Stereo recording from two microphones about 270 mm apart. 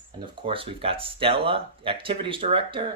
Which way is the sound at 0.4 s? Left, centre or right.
Centre.